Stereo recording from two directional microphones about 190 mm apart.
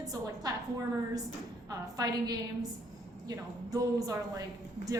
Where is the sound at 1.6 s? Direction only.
20° right (ahead or behind).